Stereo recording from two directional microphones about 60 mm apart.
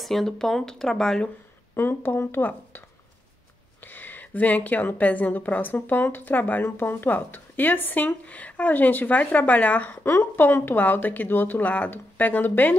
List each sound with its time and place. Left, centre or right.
0.0 s speech: centre
1.8 s speech: left
3.8 s a woman's voice: left
10.0 s speech: left